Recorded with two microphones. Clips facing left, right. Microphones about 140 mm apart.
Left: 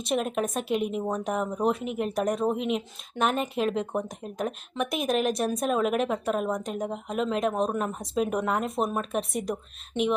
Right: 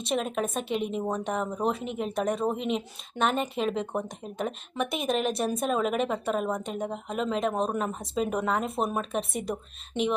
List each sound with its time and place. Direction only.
0.0 s a woman's voice: centre (ahead or behind)